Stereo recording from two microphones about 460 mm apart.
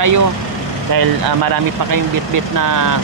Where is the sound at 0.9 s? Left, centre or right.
Right.